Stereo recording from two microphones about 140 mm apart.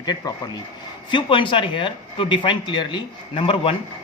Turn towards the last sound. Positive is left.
turn(degrees=40)  # may be behind; listen again after turning